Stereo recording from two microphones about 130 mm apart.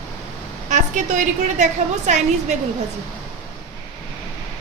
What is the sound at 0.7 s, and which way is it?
A woman's voice, 70° right (ahead or behind).